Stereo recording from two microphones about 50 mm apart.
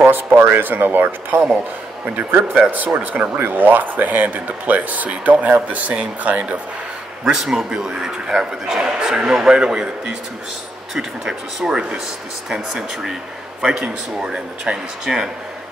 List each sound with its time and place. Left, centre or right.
0.0 s speech: right
2.5 s speech: right
7.2 s a man's voice: centre
11.0 s a man's voice: centre